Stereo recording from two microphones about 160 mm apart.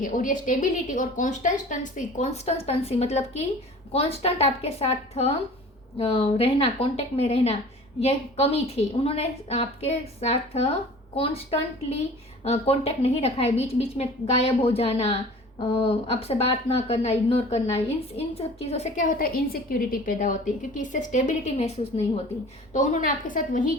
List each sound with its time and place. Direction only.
0.0 s a woman's voice: 55° left (ahead or behind)